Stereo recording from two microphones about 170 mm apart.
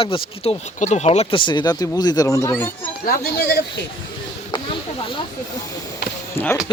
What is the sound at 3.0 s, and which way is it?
Speech, 60° left (ahead or behind).